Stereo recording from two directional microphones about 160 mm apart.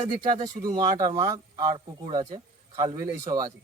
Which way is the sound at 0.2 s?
30° right (ahead or behind).